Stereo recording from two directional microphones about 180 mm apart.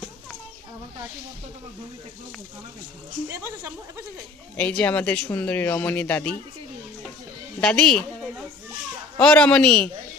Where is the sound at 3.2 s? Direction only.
15° right (ahead or behind).